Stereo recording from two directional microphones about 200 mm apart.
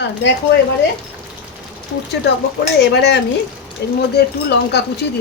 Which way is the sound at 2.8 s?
55° left (ahead or behind).